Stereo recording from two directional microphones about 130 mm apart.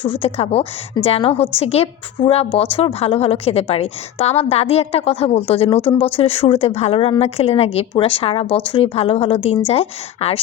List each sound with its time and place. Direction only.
0.1 s a woman's voice: 50° left (ahead or behind)